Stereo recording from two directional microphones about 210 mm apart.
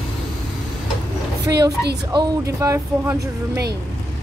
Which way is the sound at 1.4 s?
15° right (ahead or behind).